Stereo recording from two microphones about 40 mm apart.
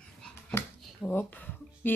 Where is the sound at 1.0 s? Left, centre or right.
Left.